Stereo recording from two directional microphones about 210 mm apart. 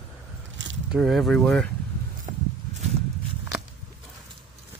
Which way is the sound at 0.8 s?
Centre (ahead or behind).